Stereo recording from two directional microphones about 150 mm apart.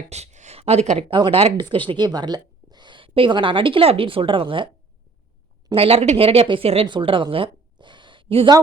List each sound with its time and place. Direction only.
0.1 s a woman's voice: 50° right (ahead or behind)
5.7 s a woman's voice: 40° right (ahead or behind)